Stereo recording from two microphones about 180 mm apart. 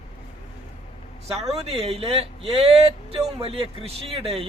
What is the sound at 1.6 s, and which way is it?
A man's voice, 35° right (ahead or behind).